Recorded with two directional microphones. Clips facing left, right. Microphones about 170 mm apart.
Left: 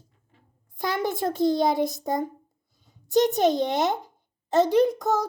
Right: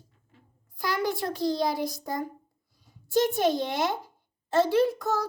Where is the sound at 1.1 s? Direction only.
50° left (ahead or behind).